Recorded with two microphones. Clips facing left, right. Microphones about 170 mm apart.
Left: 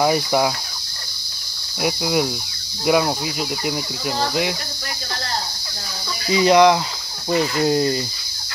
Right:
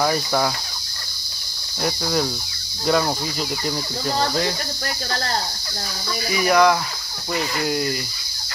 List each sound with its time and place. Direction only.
0.0 s speech: 15° left (ahead or behind)
1.8 s speech: 10° left (ahead or behind)
4.2 s speech: 10° left (ahead or behind)
6.3 s speech: 20° left (ahead or behind)